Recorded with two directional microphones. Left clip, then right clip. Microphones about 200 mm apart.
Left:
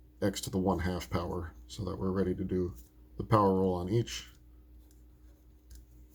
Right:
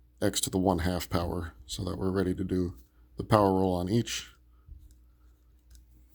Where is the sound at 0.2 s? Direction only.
55° right (ahead or behind).